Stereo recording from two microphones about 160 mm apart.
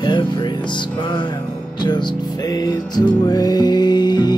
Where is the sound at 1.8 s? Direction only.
25° left (ahead or behind).